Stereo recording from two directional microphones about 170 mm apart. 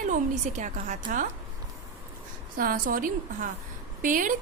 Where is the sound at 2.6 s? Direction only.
55° right (ahead or behind).